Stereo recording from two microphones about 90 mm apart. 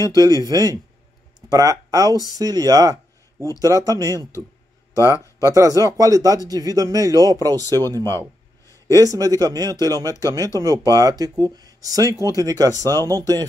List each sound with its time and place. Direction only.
0.0 s speech: 40° right (ahead or behind)
4.9 s speech: 35° left (ahead or behind)
5.5 s speech: 40° right (ahead or behind)
8.1 s a sound: 30° left (ahead or behind)
8.8 s speech: 40° right (ahead or behind)